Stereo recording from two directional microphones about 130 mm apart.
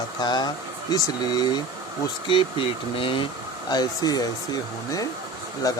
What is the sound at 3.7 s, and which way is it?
Speech, 30° left (ahead or behind).